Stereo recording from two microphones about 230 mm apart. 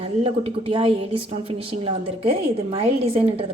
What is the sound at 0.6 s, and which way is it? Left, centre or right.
A woman's voice, right.